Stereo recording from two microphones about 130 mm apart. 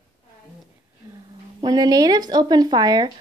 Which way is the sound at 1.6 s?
30° right (ahead or behind).